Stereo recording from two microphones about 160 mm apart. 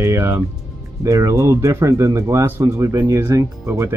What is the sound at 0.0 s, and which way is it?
Speech, 20° right (ahead or behind).